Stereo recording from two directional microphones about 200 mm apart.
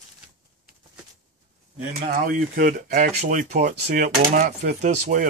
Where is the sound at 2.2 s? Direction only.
45° right (ahead or behind).